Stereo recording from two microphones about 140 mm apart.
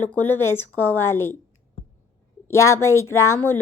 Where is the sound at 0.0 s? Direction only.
15° left (ahead or behind).